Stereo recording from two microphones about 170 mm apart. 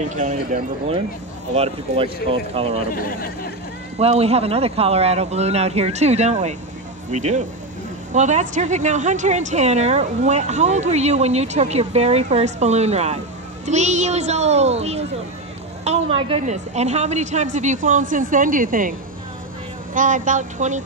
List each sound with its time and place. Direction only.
0.1 s a woman's voice: 45° right (ahead or behind)
2.9 s speech: 60° left (ahead or behind)
4.0 s a woman's voice: 35° right (ahead or behind)